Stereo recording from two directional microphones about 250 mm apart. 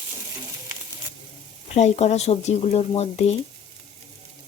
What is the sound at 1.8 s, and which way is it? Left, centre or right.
Speech, left.